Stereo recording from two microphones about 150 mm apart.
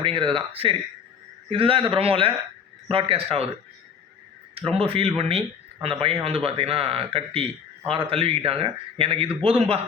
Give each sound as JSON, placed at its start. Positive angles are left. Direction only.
{"t": 0.0, "sound": "speech", "side_deg": -35}
{"t": 4.7, "sound": "speech", "side_deg": -40}